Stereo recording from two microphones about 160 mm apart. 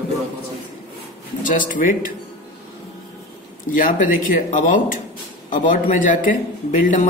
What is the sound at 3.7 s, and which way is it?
Speech, 60° left (ahead or behind).